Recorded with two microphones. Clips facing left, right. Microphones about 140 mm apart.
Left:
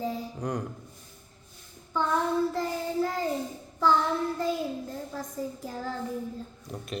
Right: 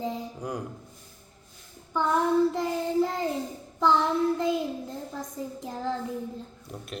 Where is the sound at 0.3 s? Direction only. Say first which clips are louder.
Left 2 dB; 10° right (ahead or behind).